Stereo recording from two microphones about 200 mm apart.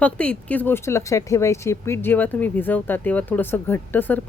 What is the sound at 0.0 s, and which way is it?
Speech, 5° left (ahead or behind).